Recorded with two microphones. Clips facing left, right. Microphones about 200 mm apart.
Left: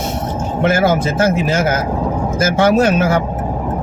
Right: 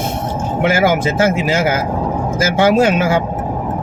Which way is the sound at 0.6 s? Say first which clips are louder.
Even; 10° right (ahead or behind).